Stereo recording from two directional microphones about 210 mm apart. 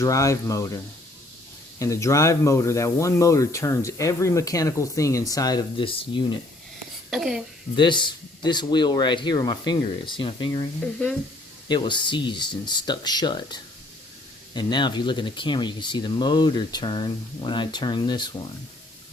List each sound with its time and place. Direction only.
0.0 s speech: 15° left (ahead or behind)
1.8 s speech: 15° left (ahead or behind)
7.1 s a woman's voice: centre (ahead or behind)
7.8 s speech: 20° left (ahead or behind)
11.7 s speech: 20° left (ahead or behind)